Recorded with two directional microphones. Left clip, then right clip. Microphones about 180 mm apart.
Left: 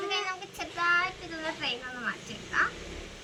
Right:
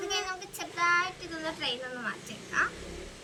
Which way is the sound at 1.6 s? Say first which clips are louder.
Even; 20° right (ahead or behind).